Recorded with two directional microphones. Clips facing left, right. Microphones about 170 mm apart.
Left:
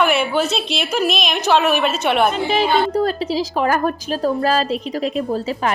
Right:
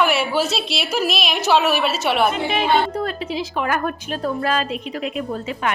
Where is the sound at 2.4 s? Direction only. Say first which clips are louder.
Left 2 dB; 35° left (ahead or behind).